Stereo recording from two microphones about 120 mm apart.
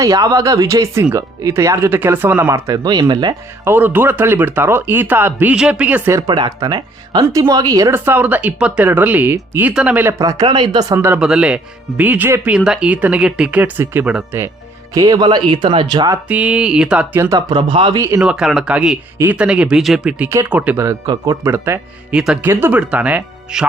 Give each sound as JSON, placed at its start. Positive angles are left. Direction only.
{"t": 0.0, "sound": "speech", "side_deg": -30}
{"t": 3.6, "sound": "speech", "side_deg": -15}
{"t": 6.1, "sound": "speech", "side_deg": -30}
{"t": 10.9, "sound": "speech", "side_deg": -20}
{"t": 11.2, "sound": "speech", "side_deg": -5}
{"t": 14.9, "sound": "speech", "side_deg": -30}
{"t": 16.3, "sound": "speech", "side_deg": -10}
{"t": 17.2, "sound": "speech", "side_deg": -25}
{"t": 17.5, "sound": "speech", "side_deg": -40}
{"t": 18.2, "sound": "speech", "side_deg": -5}
{"t": 21.1, "sound": "speech", "side_deg": -25}
{"t": 22.1, "sound": "speech", "side_deg": -5}
{"t": 22.4, "sound": "speech", "side_deg": -20}